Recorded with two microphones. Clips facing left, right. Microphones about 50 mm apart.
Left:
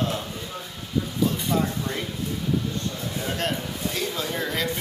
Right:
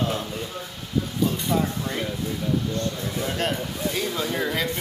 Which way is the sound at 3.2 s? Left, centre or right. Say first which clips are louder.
Right 1 dB; centre.